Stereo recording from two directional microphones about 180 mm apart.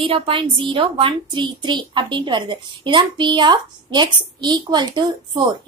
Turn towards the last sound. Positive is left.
turn(degrees=-25)  # may be behind; listen again after turning